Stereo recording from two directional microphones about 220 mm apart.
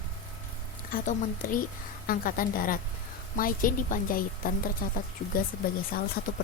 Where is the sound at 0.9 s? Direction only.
40° left (ahead or behind).